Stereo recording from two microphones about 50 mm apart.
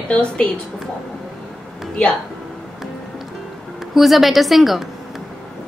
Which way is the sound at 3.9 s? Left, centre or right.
Centre.